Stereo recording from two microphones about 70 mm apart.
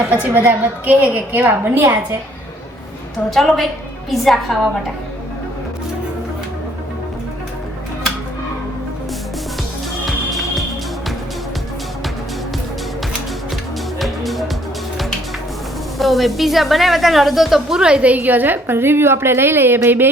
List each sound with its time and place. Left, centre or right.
0.1 s a woman's voice: right
3.2 s a woman's voice: centre
14.0 s music: centre
16.0 s a woman's voice: centre; by 20.1 s right